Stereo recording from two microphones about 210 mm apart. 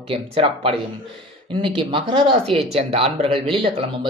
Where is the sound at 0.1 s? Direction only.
25° right (ahead or behind).